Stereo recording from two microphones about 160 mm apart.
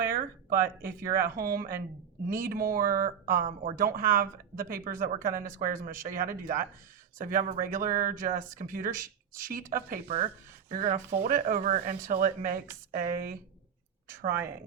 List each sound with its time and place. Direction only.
0.0 s a woman's voice: 65° right (ahead or behind)